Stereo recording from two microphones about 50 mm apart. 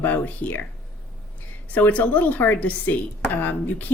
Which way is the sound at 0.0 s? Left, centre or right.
Left.